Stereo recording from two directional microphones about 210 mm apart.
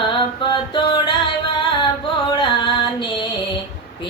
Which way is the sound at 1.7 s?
25° left (ahead or behind).